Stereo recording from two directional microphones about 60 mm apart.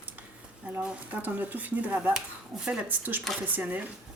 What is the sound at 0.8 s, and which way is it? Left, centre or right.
Speech, right.